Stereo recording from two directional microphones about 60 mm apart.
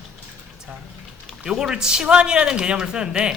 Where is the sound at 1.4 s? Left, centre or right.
Centre.